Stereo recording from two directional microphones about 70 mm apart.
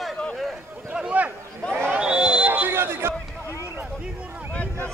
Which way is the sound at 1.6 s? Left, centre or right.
Centre.